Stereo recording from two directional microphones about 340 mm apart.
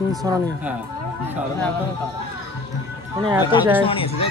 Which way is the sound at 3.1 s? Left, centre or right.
Centre.